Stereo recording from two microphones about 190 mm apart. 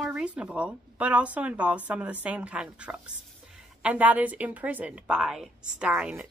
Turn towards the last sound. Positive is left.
turn(degrees=-5)  # may be behind; listen again after turning